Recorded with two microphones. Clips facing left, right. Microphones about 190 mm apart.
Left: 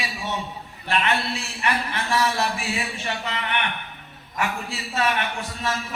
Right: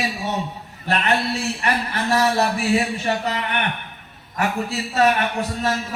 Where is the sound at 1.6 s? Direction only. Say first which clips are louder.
Right 2 dB; 40° right (ahead or behind).